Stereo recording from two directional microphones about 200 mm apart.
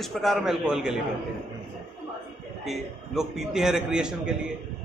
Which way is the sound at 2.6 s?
Centre (ahead or behind).